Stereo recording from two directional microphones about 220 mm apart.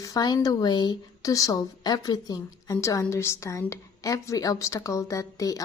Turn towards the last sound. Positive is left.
turn(degrees=15)  # may be behind; listen again after turning